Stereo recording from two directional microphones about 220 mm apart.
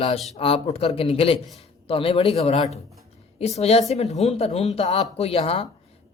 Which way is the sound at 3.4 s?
30° left (ahead or behind).